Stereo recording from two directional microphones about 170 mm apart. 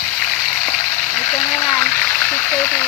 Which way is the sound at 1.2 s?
30° left (ahead or behind).